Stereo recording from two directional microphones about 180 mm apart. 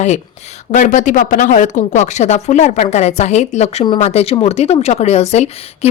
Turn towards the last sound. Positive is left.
turn(degrees=35)  # may be behind; listen again after turning